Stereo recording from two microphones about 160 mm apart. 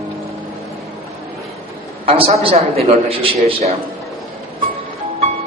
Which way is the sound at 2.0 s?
40° right (ahead or behind).